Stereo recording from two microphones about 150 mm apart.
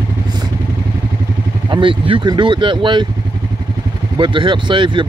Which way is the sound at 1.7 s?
35° right (ahead or behind).